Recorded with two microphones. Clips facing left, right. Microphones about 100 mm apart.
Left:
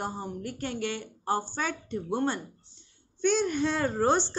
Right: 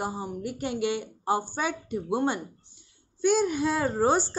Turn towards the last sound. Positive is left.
turn(degrees=-5)  # may be behind; listen again after turning